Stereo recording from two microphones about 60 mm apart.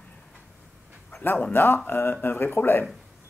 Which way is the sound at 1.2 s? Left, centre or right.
Left.